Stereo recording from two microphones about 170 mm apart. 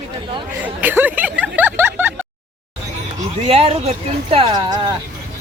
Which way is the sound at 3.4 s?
40° right (ahead or behind).